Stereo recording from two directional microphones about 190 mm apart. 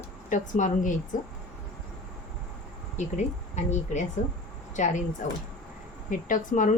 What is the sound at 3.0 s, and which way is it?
A woman's voice, 40° left (ahead or behind).